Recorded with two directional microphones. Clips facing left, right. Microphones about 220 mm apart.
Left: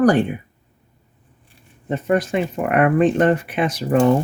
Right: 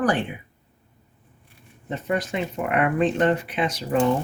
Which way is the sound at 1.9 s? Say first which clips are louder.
Left 7 dB; 55° left (ahead or behind).